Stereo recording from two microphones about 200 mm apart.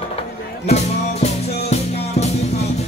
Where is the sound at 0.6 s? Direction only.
35° left (ahead or behind).